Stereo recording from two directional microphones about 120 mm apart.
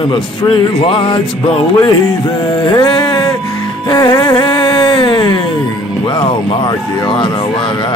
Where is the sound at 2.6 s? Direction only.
35° left (ahead or behind).